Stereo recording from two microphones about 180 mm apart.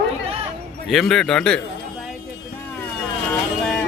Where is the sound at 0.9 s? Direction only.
Centre (ahead or behind).